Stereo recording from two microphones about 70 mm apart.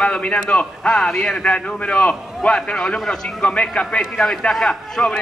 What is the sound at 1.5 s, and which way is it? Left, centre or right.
A man's voice, centre.